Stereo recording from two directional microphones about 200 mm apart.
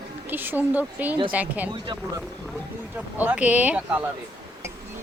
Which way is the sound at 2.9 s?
10° right (ahead or behind).